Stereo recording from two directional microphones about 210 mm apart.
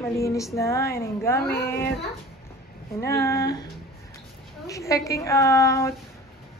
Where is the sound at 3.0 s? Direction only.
15° left (ahead or behind).